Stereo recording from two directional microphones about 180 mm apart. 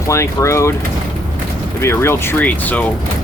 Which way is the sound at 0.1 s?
15° left (ahead or behind).